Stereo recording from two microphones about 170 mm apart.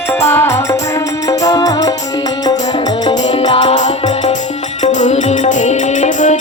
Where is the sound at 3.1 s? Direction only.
30° left (ahead or behind).